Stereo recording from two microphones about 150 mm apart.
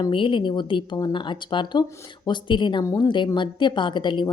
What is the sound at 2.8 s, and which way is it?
Speech, 20° left (ahead or behind).